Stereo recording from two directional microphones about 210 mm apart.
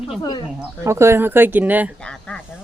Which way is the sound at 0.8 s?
15° right (ahead or behind).